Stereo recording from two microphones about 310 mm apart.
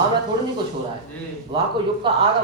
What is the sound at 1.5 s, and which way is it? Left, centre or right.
Speech, centre.